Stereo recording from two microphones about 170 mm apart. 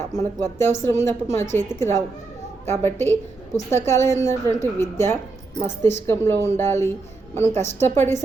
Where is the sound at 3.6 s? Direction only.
15° left (ahead or behind).